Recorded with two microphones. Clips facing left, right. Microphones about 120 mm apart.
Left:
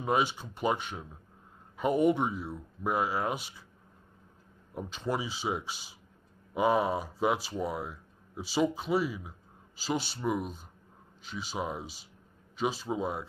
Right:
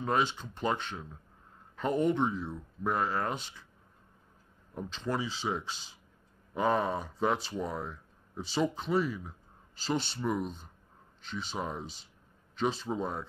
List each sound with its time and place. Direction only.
0.0 s speech: 10° left (ahead or behind)
4.7 s speech: 10° left (ahead or behind)